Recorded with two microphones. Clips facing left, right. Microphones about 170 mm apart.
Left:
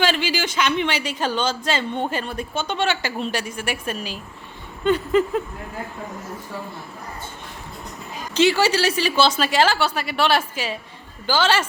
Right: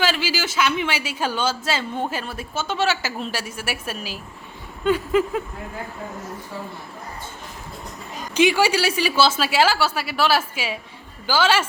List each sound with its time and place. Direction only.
0.0 s a woman's voice: 5° right (ahead or behind)
8.3 s a woman's voice: 10° right (ahead or behind)